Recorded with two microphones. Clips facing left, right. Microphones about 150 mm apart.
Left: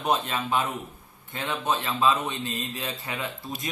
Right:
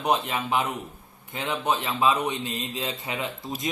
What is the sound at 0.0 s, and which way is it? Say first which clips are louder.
A man's voice: right 1 dB; 15° right (ahead or behind).